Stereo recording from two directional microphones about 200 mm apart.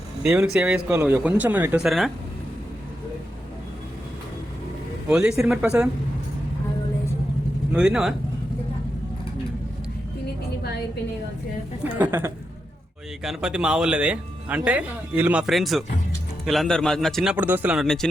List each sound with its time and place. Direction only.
0.2 s speech: 5° right (ahead or behind)
5.0 s speech: 5° right (ahead or behind)
7.7 s speech: 5° right (ahead or behind)
11.8 s speech: 10° right (ahead or behind)